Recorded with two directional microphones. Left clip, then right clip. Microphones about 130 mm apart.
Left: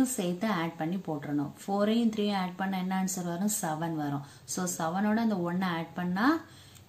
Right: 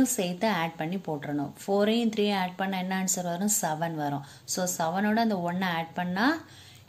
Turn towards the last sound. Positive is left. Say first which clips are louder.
# right 2 dB
turn(degrees=-25)  # may be behind; listen again after turning